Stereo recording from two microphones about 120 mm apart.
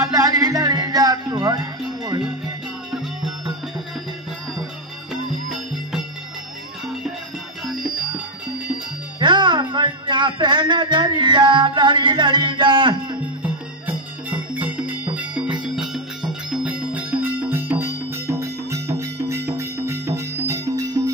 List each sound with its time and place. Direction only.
0.0 s music: 30° right (ahead or behind)
5.1 s music: 5° right (ahead or behind)
9.2 s speech: 40° right (ahead or behind)
14.5 s music: 15° right (ahead or behind)